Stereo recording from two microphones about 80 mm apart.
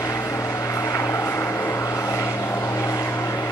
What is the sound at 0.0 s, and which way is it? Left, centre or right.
Vehicle, left.